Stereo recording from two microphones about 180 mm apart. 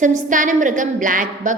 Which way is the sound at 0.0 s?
45° right (ahead or behind).